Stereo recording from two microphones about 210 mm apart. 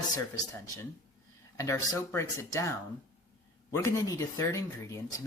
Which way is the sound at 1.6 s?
15° left (ahead or behind).